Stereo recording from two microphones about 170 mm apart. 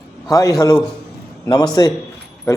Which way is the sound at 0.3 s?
20° left (ahead or behind).